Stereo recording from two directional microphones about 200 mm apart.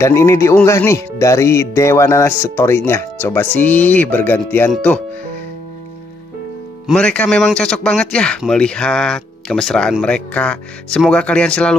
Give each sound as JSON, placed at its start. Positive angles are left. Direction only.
{"t": 0.0, "sound": "speech", "side_deg": 15}
{"t": 6.9, "sound": "speech", "side_deg": 5}